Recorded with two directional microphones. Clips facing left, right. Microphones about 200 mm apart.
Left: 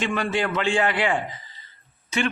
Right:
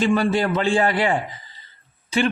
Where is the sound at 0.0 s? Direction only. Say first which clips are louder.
Right 6 dB; 35° right (ahead or behind).